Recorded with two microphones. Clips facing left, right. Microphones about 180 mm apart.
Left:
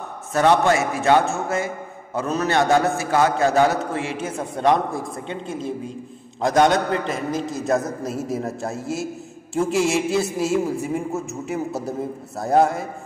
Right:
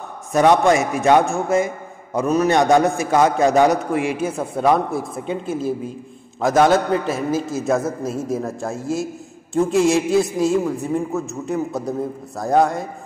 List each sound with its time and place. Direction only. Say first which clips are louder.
0.3 s a man's voice: right 3 dB; 15° right (ahead or behind); by 12.8 s 5° left (ahead or behind)